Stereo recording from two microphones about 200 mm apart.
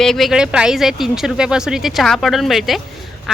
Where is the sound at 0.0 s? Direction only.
Centre (ahead or behind).